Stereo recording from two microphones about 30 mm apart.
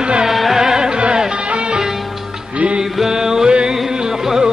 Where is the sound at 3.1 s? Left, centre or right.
Centre.